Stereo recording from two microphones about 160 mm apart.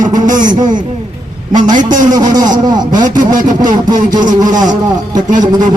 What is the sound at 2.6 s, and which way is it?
Speech, 25° right (ahead or behind).